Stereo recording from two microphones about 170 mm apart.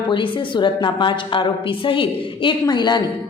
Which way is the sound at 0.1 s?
30° left (ahead or behind).